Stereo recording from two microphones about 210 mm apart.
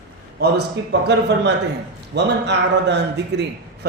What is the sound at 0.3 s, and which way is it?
A man's voice, 50° right (ahead or behind).